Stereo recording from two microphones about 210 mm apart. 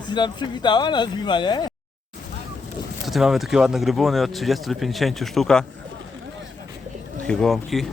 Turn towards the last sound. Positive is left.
turn(degrees=0)  # may be behind; listen again after turning